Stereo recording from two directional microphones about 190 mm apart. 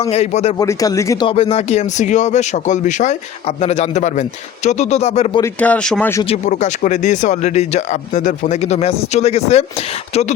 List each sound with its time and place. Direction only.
0.1 s speech: 35° left (ahead or behind)
0.6 s speech: 20° left (ahead or behind)
1.3 s speech: 30° left (ahead or behind)
5.4 s speech: 5° left (ahead or behind)
6.2 s speech: 35° left (ahead or behind)